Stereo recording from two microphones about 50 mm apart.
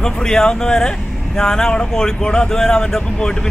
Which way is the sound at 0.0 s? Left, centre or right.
Centre.